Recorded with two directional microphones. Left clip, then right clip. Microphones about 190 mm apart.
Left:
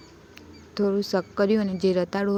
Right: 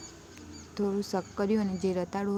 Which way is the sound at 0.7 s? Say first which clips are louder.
Left 7 dB; 20° left (ahead or behind).